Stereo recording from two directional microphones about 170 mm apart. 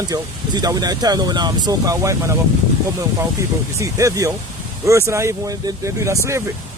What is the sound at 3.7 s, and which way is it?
Speech, 20° right (ahead or behind).